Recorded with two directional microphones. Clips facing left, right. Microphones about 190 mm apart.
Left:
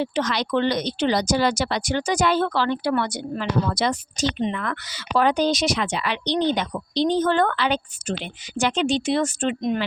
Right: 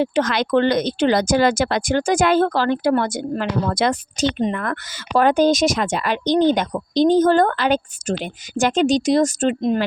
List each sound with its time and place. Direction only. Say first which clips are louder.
0.0 s speech: right 5 dB; 50° right (ahead or behind)